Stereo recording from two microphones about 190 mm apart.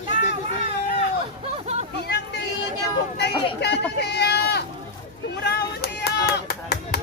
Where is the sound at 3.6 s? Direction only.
60° left (ahead or behind).